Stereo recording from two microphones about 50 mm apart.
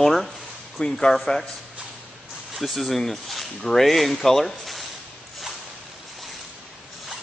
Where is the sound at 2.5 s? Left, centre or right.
Centre.